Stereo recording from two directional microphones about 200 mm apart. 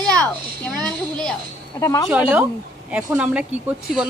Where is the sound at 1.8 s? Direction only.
15° left (ahead or behind).